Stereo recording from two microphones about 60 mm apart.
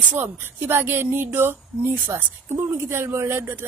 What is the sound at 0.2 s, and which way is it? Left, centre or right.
Speech, right.